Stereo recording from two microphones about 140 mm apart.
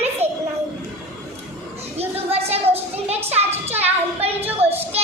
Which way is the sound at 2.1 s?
45° right (ahead or behind).